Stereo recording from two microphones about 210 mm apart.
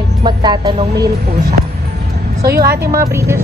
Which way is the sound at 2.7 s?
15° right (ahead or behind).